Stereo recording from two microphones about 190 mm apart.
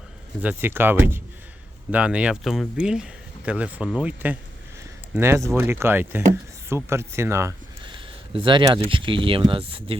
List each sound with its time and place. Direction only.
0.4 s speech: 10° right (ahead or behind)
7.9 s speech: 25° right (ahead or behind)